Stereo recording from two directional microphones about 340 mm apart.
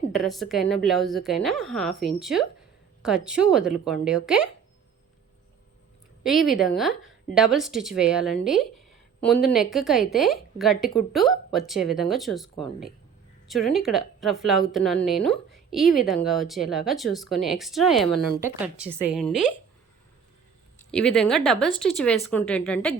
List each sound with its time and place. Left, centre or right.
0.1 s a woman's voice: centre
6.2 s a woman's voice: centre
20.9 s a woman's voice: centre